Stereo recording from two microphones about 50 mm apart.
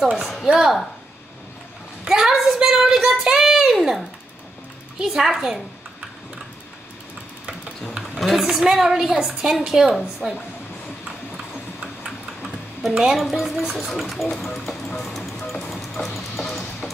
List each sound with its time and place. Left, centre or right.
0.0 s a woman's voice: centre
2.0 s a woman's voice: centre
8.2 s a woman's voice: centre
11.3 s horse: centre
13.0 s speech: centre
15.0 s vehicle: centre
15.6 s music: centre